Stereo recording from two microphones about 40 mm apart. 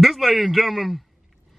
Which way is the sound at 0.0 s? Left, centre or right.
Centre.